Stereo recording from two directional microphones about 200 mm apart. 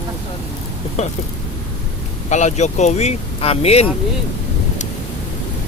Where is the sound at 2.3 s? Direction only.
35° left (ahead or behind).